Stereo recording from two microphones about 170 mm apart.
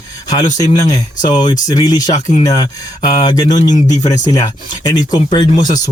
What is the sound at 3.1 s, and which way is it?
Speech, 25° left (ahead or behind).